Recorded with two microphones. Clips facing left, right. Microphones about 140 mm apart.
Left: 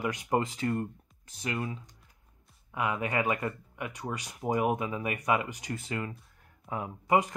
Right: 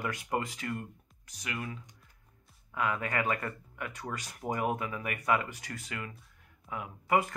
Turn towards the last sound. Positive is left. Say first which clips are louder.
# left 2 dB
turn(degrees=20)  # may be behind; listen again after turning